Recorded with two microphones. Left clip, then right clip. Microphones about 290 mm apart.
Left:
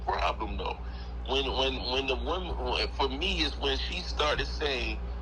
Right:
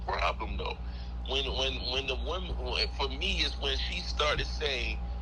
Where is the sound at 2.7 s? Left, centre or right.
Centre.